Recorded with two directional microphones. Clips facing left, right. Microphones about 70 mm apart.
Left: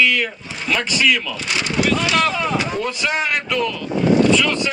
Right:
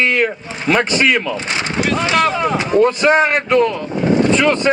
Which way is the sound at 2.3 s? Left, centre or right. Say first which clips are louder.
Right 5 dB; right.